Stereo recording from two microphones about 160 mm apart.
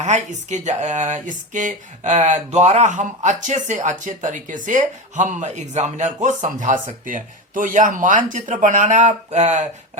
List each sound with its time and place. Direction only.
0.0 s speech: 50° right (ahead or behind)